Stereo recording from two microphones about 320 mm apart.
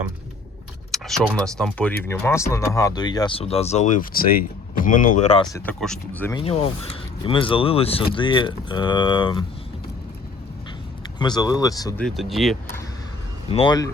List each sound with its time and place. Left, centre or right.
0.9 s speech: centre
6.4 s speech: centre
11.2 s speech: centre
13.5 s speech: centre